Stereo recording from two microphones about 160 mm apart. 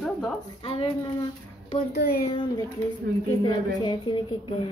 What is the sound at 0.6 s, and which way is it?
Speech, 35° left (ahead or behind).